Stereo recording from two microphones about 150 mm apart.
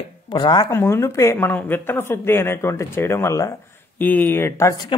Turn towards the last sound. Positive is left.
turn(degrees=20)  # may be behind; listen again after turning